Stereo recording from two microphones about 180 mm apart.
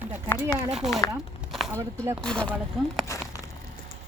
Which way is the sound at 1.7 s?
15° right (ahead or behind).